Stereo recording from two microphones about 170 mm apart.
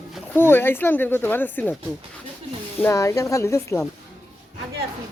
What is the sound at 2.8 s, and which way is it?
Speech, 15° left (ahead or behind).